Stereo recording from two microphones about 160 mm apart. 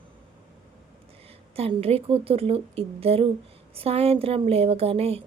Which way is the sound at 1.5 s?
40° right (ahead or behind).